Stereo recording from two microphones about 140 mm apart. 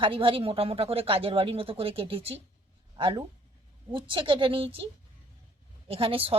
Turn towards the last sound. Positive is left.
turn(degrees=-40)  # may be behind; listen again after turning